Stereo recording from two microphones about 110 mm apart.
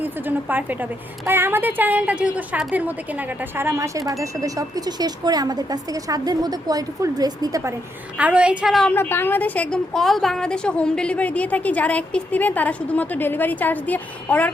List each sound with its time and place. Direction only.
0.0 s a woman's voice: 15° right (ahead or behind); by 7.6 s 35° right (ahead or behind)
8.2 s a woman's voice: 10° right (ahead or behind)
8.9 s a woman's voice: 20° left (ahead or behind)